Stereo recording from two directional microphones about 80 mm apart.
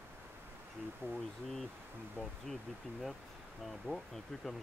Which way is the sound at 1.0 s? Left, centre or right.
Centre.